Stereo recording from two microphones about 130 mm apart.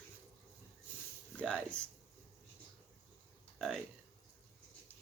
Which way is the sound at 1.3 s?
10° left (ahead or behind).